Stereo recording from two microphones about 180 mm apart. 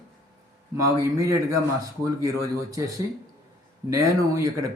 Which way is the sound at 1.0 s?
20° right (ahead or behind).